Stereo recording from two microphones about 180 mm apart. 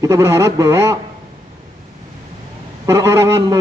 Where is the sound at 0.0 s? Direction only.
15° right (ahead or behind).